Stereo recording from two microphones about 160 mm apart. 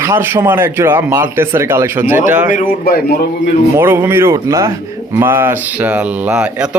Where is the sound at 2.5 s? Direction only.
70° left (ahead or behind).